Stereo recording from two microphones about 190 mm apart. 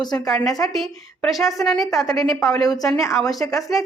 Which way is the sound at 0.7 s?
Centre (ahead or behind).